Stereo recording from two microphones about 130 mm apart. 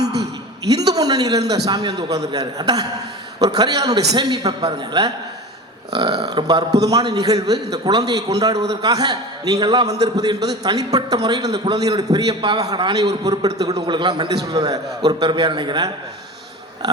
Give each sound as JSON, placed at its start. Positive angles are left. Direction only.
{"t": 0.7, "sound": "a man's voice", "side_deg": -30}